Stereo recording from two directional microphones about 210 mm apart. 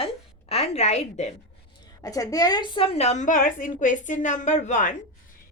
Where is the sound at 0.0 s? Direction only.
30° left (ahead or behind).